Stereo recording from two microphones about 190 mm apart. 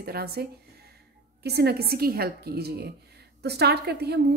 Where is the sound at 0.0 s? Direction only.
55° right (ahead or behind).